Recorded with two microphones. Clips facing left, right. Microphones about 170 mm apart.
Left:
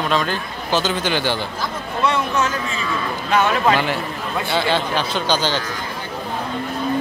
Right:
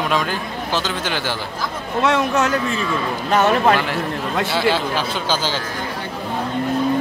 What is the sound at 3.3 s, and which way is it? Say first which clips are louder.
Speech: right 2 dB; 45° right (ahead or behind).